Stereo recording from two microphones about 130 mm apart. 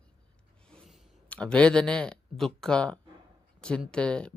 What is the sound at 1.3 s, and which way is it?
Speech, 5° left (ahead or behind).